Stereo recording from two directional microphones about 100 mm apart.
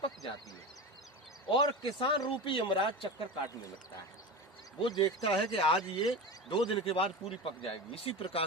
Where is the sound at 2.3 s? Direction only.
60° left (ahead or behind).